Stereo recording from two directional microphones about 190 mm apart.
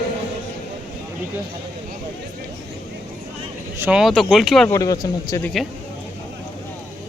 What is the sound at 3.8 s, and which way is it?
Speech, 5° right (ahead or behind).